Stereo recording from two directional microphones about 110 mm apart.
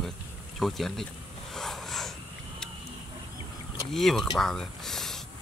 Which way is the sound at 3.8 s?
5° left (ahead or behind).